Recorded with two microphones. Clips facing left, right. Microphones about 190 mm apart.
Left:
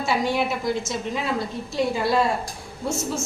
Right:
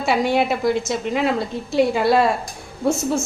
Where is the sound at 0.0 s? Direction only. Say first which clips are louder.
Right 4 dB; 65° right (ahead or behind).